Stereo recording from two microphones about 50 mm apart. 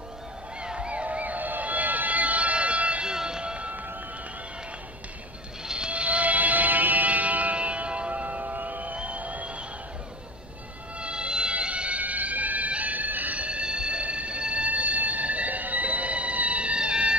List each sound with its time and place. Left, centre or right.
0.6 s a sound: right
5.7 s music: right
11.0 s music: right